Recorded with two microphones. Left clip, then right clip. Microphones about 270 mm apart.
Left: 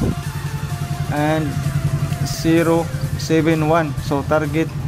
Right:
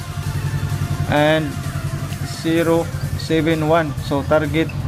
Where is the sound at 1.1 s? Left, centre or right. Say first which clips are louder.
Right 4 dB; centre.